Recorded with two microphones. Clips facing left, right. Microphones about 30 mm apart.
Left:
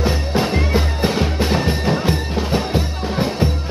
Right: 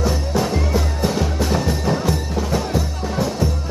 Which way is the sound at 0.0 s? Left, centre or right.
Left.